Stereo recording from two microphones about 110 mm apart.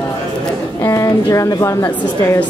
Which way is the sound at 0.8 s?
30° left (ahead or behind).